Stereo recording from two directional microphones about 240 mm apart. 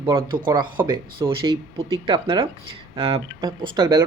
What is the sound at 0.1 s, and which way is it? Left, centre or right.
Speech, centre.